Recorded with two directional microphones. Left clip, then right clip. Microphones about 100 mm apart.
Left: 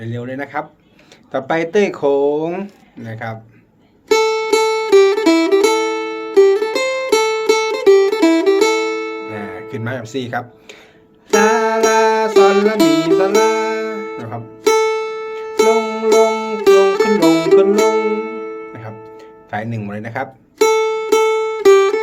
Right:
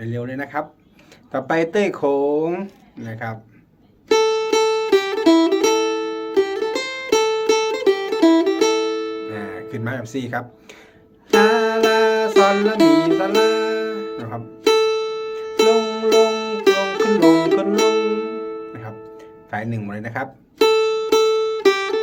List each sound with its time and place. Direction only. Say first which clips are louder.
0.0 s speech: left 2 dB; 5° left (ahead or behind)
4.1 s music: left 3 dB; 30° left (ahead or behind)
9.3 s music: left 3 dB; 10° left (ahead or behind)
11.3 s music: left 2 dB; 25° left (ahead or behind)
11.5 s music: left 3 dB; 10° left (ahead or behind)
12.3 s music: left 4 dB; 30° left (ahead or behind)
13.7 s music: left 2 dB; 15° left (ahead or behind)
14.0 s music: left 2 dB; 30° left (ahead or behind)
17.7 s music: left 3 dB; 20° left (ahead or behind)
18.8 s music: left 2 dB; 10° left (ahead or behind)
20.6 s music: left 2 dB; 25° left (ahead or behind)